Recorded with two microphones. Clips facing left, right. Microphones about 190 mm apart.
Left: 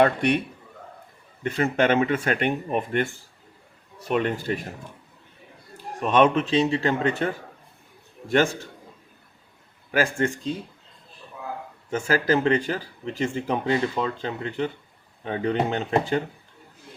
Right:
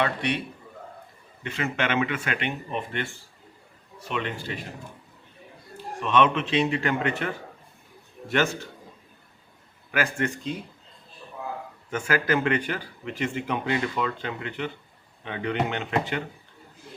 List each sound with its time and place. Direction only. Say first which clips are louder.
0.0 s speech: left 6 dB; 50° left (ahead or behind)
1.5 s speech: left 6 dB; 40° left (ahead or behind)
4.1 s speech: left 7 dB; 45° left (ahead or behind)
6.0 s speech: left 3 dB; 45° left (ahead or behind)
9.9 s a man's voice: left 4 dB; 30° left (ahead or behind)
11.9 s speech: left 3 dB; 30° left (ahead or behind)